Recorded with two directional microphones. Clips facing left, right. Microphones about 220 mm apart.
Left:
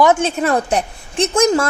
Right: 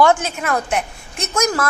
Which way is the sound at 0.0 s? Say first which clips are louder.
Left 2 dB; 25° left (ahead or behind).